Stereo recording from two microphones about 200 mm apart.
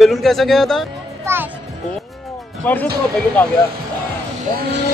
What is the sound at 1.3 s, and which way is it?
Music, 10° right (ahead or behind).